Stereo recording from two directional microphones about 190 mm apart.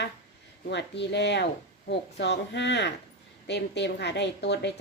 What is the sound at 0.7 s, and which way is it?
A woman's voice, 65° left (ahead or behind).